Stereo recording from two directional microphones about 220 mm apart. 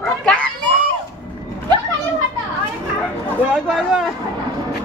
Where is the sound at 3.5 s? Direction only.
Centre (ahead or behind).